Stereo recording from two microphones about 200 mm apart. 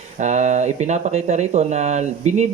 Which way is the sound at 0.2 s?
35° right (ahead or behind).